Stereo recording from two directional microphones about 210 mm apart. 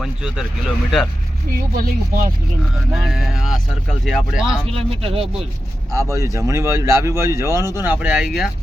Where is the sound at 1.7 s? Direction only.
40° right (ahead or behind).